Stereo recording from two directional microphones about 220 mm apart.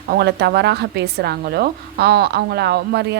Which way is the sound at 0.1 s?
50° right (ahead or behind).